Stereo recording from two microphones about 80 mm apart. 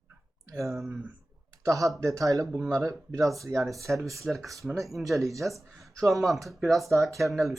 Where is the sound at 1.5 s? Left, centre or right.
Right.